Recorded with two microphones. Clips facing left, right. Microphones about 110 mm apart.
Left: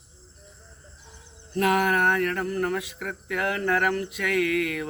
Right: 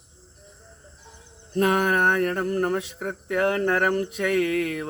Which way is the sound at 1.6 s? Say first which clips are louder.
Right 1 dB; 30° right (ahead or behind).